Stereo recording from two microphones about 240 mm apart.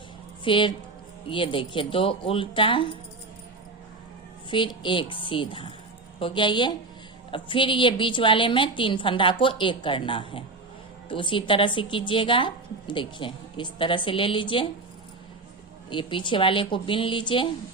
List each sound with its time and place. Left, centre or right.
0.4 s a woman's voice: left
4.5 s a woman's voice: centre
15.9 s a woman's voice: centre